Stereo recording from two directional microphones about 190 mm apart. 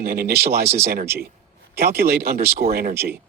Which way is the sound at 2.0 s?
55° right (ahead or behind).